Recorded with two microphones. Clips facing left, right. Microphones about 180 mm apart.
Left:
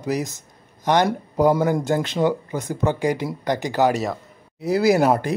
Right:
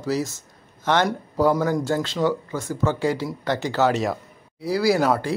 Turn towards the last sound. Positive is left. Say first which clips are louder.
# left 3 dB
turn(degrees=20)  # may be behind; listen again after turning